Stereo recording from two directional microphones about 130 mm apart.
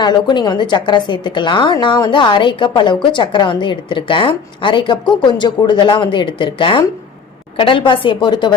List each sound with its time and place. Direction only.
0.0 s a woman's voice: 35° left (ahead or behind)